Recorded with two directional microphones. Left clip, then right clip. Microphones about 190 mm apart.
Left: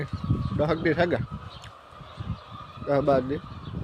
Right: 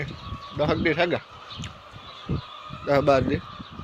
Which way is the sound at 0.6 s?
20° left (ahead or behind).